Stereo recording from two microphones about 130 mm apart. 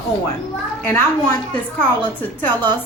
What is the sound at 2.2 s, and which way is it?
Speech, 15° left (ahead or behind).